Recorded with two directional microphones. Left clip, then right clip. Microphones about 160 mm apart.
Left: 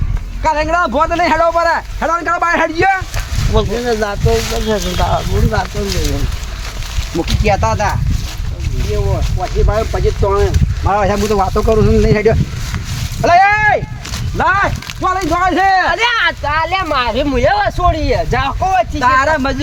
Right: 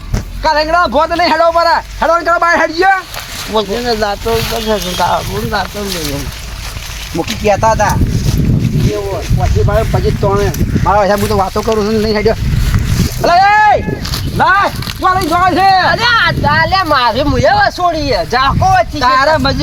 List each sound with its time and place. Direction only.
0.4 s a man's voice: 10° left (ahead or behind)
7.4 s speech: 60° right (ahead or behind)
9.9 s a man's voice: centre (ahead or behind)
10.8 s a man's voice: 10° left (ahead or behind)
13.2 s vehicle: 15° right (ahead or behind)
14.3 s a man's voice: centre (ahead or behind)